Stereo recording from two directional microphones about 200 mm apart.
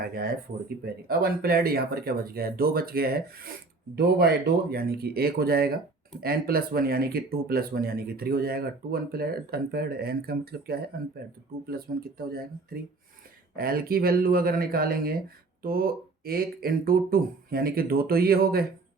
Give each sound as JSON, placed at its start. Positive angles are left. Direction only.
{"t": 0.0, "sound": "speech", "side_deg": -45}